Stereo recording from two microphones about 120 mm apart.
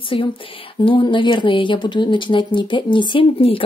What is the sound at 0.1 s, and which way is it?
Speech, 50° left (ahead or behind).